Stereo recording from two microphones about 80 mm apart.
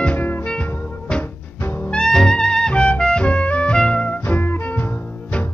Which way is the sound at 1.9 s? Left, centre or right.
Centre.